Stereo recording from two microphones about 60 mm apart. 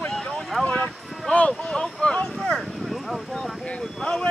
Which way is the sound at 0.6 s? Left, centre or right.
Centre.